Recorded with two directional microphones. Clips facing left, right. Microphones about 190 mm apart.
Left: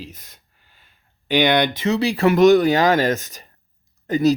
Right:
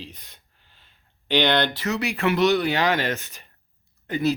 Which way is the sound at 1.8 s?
30° left (ahead or behind).